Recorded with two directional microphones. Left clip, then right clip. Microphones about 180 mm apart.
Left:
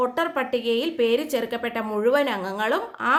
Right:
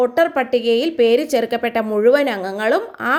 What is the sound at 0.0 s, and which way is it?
A woman's voice, 30° right (ahead or behind).